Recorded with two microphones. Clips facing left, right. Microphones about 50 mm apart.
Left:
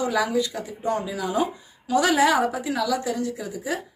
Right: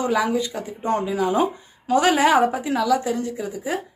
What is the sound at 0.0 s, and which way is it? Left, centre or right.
Speech, right.